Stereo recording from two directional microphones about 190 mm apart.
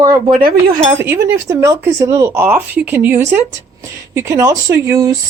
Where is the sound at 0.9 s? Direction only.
15° right (ahead or behind).